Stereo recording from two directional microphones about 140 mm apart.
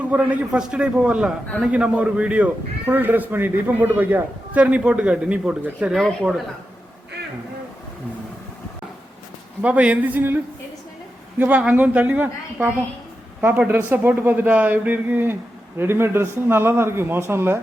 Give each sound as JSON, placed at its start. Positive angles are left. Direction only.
{"t": 0.0, "sound": "speech", "side_deg": -10}
{"t": 9.6, "sound": "speech", "side_deg": -10}